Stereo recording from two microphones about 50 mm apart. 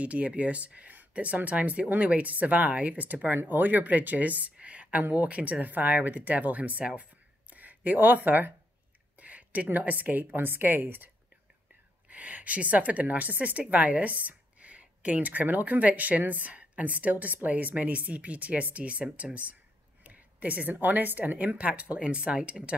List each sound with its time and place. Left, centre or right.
0.0 s a woman's voice: right
6.9 s a sound: right
9.7 s speech: right
12.1 s a woman's voice: right
20.0 s a sound: right
20.7 s a woman's voice: right